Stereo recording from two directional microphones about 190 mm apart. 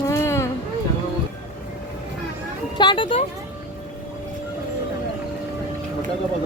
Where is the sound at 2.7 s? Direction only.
25° left (ahead or behind).